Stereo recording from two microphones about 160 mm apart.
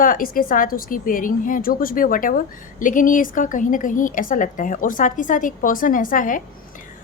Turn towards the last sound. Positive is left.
turn(degrees=55)  # may be behind; listen again after turning